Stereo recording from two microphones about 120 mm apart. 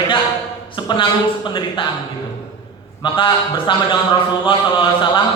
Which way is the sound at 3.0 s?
45° left (ahead or behind).